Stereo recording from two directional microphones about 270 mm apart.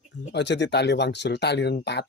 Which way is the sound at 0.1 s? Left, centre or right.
Left.